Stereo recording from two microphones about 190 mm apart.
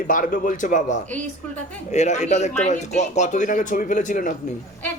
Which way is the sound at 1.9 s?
40° left (ahead or behind).